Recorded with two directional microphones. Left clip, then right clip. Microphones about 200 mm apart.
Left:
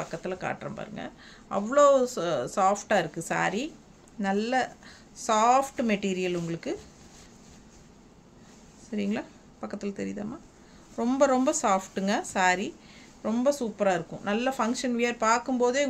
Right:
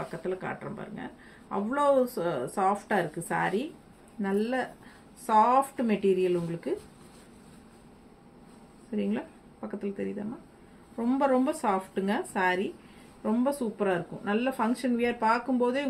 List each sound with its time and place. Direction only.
0.2 s speech: 55° left (ahead or behind)
8.9 s speech: 45° left (ahead or behind)